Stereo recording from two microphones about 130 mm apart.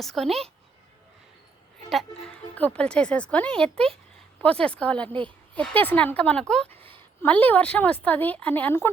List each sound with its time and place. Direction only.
0.0 s a woman's voice: centre (ahead or behind)
2.6 s a woman's voice: 10° left (ahead or behind)
6.7 s a sound: 45° right (ahead or behind)
7.2 s a woman's voice: 15° left (ahead or behind)